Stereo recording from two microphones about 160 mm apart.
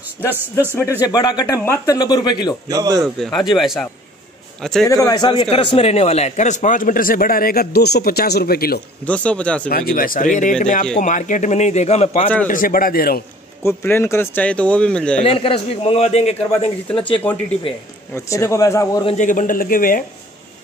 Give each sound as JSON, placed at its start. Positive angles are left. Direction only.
{"t": 0.3, "sound": "a man's voice", "side_deg": -15}
{"t": 1.0, "sound": "a man's voice", "side_deg": 25}
{"t": 2.7, "sound": "speech", "side_deg": -20}
{"t": 3.0, "sound": "a man's voice", "side_deg": 5}
{"t": 4.8, "sound": "a man's voice", "side_deg": 20}
{"t": 9.0, "sound": "speech", "side_deg": 10}
{"t": 9.7, "sound": "a man's voice", "side_deg": 70}
{"t": 12.4, "sound": "a man's voice", "side_deg": 60}
{"t": 13.7, "sound": "speech", "side_deg": 15}
{"t": 15.2, "sound": "a man's voice", "side_deg": 35}
{"t": 17.7, "sound": "a man's voice", "side_deg": 35}
{"t": 18.1, "sound": "a man's voice", "side_deg": 15}
{"t": 19.0, "sound": "a man's voice", "side_deg": 50}